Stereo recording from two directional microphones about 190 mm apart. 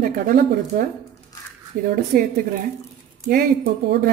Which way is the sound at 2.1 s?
55° right (ahead or behind).